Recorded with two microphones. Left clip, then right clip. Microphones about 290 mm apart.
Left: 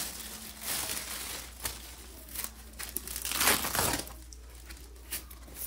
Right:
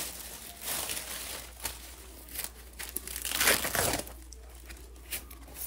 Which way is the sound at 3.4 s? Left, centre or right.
Centre.